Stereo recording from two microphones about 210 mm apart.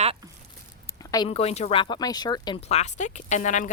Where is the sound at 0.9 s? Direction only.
20° left (ahead or behind).